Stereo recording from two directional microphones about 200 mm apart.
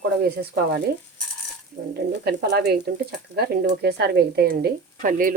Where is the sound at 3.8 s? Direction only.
55° right (ahead or behind).